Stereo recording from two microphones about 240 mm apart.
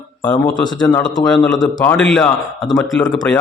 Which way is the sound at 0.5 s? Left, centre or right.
Centre.